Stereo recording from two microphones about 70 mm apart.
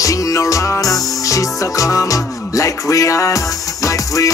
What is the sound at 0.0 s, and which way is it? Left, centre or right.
Music, left.